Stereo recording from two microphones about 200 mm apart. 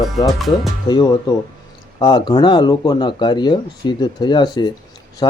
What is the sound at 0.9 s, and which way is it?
Speech, 20° left (ahead or behind).